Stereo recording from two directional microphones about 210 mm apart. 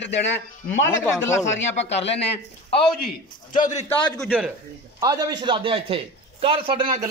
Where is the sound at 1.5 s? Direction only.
60° left (ahead or behind).